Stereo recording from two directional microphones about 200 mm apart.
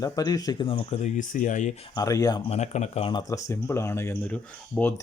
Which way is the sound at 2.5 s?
35° left (ahead or behind).